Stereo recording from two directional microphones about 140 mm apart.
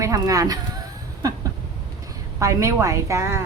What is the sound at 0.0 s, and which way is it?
Speech, 25° right (ahead or behind).